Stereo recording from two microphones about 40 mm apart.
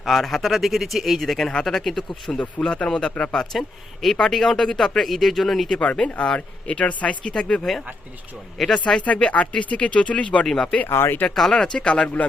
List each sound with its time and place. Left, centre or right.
0.0 s speech: centre
1.5 s a man's voice: centre
2.4 s a man's voice: left; by 5.6 s centre
5.8 s speech: left
7.7 s speech: centre
9.0 s speech: left
10.4 s a man's voice: centre
10.8 s speech: left
11.5 s speech: left